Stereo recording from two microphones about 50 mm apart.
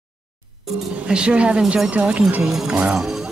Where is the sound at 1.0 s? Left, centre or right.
Centre.